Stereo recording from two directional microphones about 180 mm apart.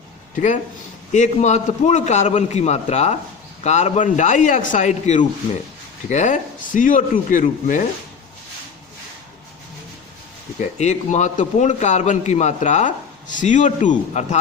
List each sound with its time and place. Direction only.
0.3 s a man's voice: 45° left (ahead or behind)
10.6 s a man's voice: 40° left (ahead or behind)